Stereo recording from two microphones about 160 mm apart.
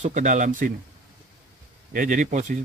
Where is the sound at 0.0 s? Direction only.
50° right (ahead or behind).